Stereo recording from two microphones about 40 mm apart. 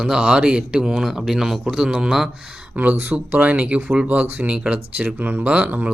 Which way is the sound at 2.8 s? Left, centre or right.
Right.